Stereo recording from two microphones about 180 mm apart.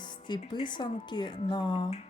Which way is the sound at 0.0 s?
25° left (ahead or behind).